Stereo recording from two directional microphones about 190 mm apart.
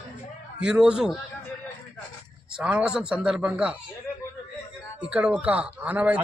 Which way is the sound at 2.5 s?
5° right (ahead or behind).